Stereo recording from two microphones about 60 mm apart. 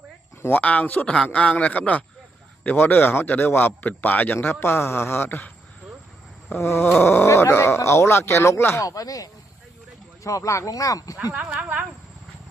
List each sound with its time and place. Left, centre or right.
0.6 s a man's voice: left
4.6 s a man's voice: left
6.6 s speech: left
7.0 s a man's voice: left
7.3 s speech: left
8.8 s speech: left
10.2 s speech: left
11.2 s speech: right